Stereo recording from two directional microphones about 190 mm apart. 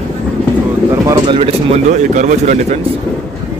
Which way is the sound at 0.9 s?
15° right (ahead or behind).